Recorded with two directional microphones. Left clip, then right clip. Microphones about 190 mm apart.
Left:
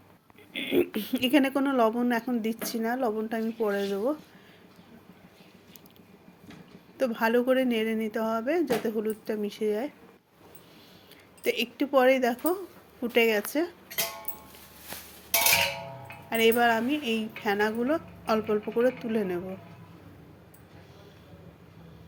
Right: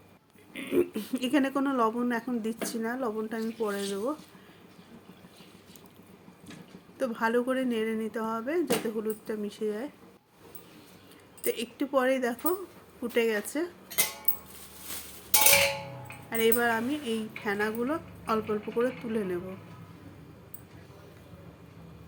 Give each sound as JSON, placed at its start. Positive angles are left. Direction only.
{"t": 0.5, "sound": "speech", "side_deg": 0}
{"t": 7.0, "sound": "speech", "side_deg": 0}
{"t": 11.4, "sound": "speech", "side_deg": 0}
{"t": 16.3, "sound": "speech", "side_deg": 5}